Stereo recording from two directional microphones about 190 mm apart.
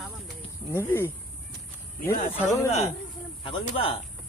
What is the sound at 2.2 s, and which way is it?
Speech, 40° left (ahead or behind).